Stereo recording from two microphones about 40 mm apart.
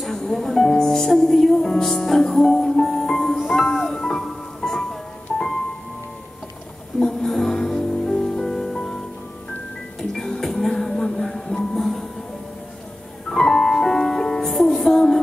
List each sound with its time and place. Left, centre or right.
0.0 s music: centre
7.0 s music: centre
9.9 s music: centre
13.3 s music: centre